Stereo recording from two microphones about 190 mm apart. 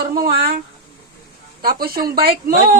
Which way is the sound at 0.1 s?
50° right (ahead or behind).